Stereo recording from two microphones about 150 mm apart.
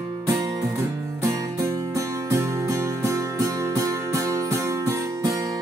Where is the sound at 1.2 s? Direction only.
20° right (ahead or behind).